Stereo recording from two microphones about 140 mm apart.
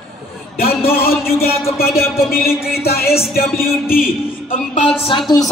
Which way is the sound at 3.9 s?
90° left.